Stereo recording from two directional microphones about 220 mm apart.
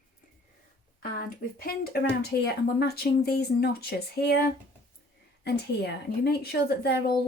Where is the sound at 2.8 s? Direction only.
45° left (ahead or behind).